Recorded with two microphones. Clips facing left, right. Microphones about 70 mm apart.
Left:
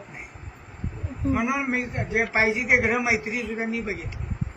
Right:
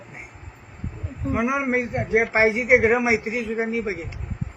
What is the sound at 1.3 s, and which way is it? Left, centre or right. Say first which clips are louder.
Speech: right 2 dB; centre.